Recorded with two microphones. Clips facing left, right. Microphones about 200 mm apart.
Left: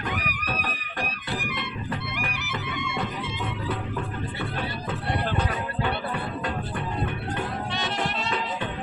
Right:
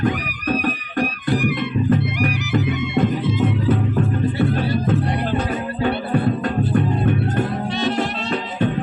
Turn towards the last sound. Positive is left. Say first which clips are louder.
# right 8 dB
turn(degrees=-45)  # may be behind; listen again after turning